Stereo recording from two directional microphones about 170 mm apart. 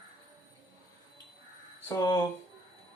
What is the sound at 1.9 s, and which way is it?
Speech, 25° left (ahead or behind).